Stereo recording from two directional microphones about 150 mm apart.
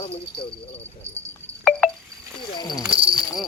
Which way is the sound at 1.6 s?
5° left (ahead or behind).